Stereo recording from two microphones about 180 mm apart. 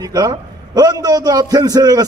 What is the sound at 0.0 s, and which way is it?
A man's voice, 20° right (ahead or behind).